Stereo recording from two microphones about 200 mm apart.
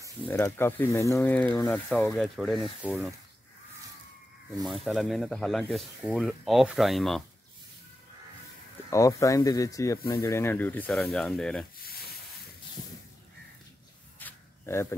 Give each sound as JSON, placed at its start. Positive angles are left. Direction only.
{"t": 0.3, "sound": "speech", "side_deg": 10}
{"t": 4.5, "sound": "speech", "side_deg": 0}
{"t": 8.9, "sound": "speech", "side_deg": 15}
{"t": 11.8, "sound": "a sound", "side_deg": 50}
{"t": 14.2, "sound": "snake", "side_deg": 10}